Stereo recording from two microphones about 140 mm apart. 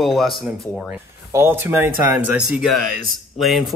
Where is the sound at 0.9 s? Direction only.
15° right (ahead or behind).